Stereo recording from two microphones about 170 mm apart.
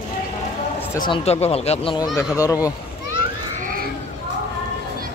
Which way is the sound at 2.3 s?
20° left (ahead or behind).